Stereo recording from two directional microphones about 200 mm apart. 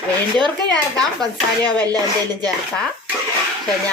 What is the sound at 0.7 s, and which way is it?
Speech, 5° left (ahead or behind).